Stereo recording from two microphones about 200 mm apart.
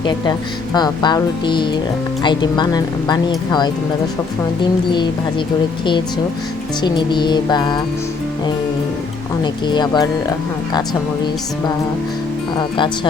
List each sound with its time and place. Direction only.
0.0 s speech: 20° left (ahead or behind)
6.8 s speech: 20° left (ahead or behind)
9.4 s speech: 20° left (ahead or behind)
12.5 s speech: 25° left (ahead or behind)